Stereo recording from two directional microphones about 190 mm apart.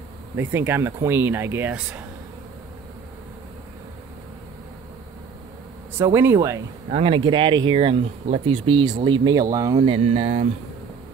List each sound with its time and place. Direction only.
0.4 s speech: 10° right (ahead or behind)
5.9 s speech: 15° right (ahead or behind)
6.9 s speech: 30° right (ahead or behind)